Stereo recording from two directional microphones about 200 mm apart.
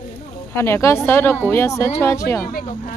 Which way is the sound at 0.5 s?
15° left (ahead or behind).